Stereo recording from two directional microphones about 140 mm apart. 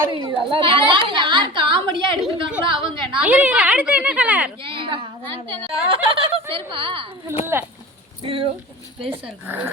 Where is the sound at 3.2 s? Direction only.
10° right (ahead or behind).